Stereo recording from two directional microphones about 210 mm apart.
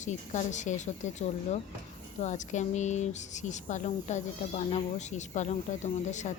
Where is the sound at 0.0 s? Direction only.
35° left (ahead or behind).